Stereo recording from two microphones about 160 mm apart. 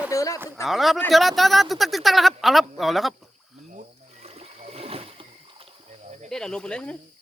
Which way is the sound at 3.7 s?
45° right (ahead or behind).